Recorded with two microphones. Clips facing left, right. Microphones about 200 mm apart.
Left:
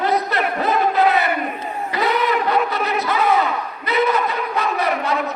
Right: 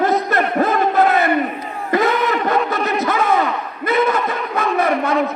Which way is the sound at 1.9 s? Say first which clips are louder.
Right 3 dB; 50° right (ahead or behind).